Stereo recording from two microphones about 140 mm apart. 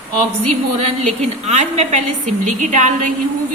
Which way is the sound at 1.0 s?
50° right (ahead or behind).